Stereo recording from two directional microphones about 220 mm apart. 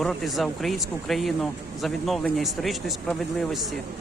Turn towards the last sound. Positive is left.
turn(degrees=0)  # may be behind; listen again after turning